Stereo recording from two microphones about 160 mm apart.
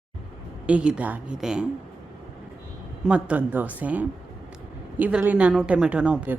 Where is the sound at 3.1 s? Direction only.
10° right (ahead or behind).